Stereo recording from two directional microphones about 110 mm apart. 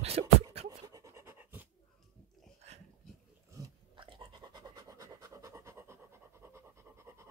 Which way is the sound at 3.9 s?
45° right (ahead or behind).